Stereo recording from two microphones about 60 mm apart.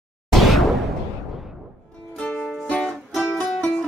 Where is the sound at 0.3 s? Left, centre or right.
Centre.